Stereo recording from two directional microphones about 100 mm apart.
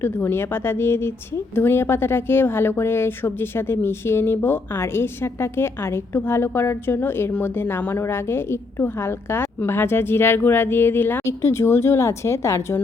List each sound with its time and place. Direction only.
0.0 s a woman's voice: 25° left (ahead or behind)